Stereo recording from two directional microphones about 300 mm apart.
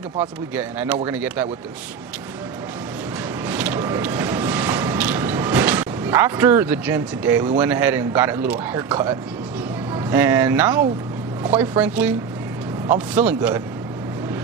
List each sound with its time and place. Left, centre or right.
0.2 s speech: centre
3.4 s vehicle: centre
7.6 s speech: centre